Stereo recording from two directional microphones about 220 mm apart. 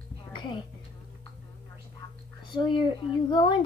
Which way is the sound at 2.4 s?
20° left (ahead or behind).